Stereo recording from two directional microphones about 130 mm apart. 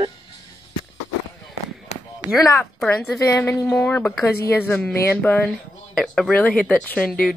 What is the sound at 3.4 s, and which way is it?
A woman's voice, 20° left (ahead or behind).